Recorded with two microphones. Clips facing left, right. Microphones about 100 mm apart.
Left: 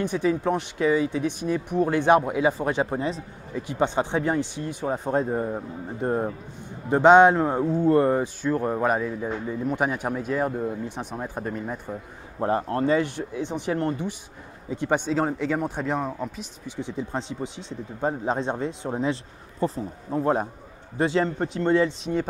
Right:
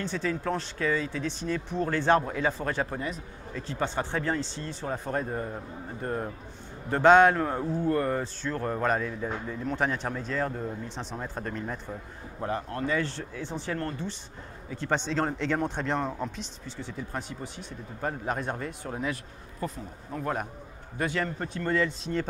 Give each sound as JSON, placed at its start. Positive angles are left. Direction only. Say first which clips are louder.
{"t": 0.0, "sound": "speech", "louder": "left 7 dB", "side_deg": 15}
{"t": 3.5, "sound": "speech", "louder": "left 6 dB", "side_deg": 15}
{"t": 12.4, "sound": "a man's voice", "louder": "left 8 dB", "side_deg": 35}
{"t": 13.0, "sound": "speech", "louder": "left 6 dB", "side_deg": 15}